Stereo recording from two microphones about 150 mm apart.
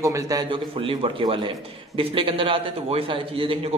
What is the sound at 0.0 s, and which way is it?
Speech, 25° right (ahead or behind).